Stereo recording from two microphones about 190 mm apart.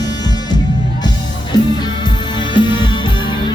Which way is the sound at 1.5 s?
25° left (ahead or behind).